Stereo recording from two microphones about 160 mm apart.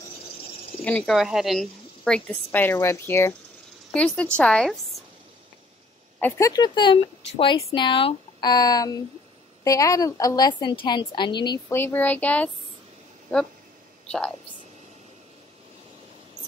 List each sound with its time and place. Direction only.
0.8 s a woman's voice: 10° left (ahead or behind)
1.1 s a woman's voice: centre (ahead or behind)
6.1 s a woman's voice: 15° left (ahead or behind)
11.7 s a woman's voice: 15° left (ahead or behind)